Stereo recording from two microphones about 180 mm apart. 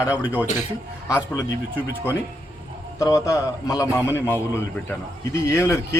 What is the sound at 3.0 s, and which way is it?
Speech, 20° left (ahead or behind).